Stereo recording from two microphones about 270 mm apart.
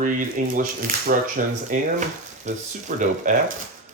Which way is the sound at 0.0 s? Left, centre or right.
Right.